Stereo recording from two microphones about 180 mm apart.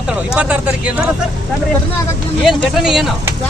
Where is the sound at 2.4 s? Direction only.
Centre (ahead or behind).